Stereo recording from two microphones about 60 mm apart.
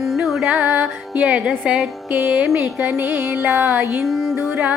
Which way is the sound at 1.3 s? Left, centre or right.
Centre.